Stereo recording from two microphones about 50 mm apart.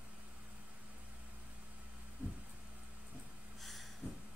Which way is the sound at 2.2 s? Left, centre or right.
Right.